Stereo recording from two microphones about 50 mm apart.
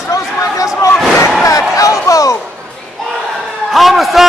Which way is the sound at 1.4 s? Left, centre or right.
Left.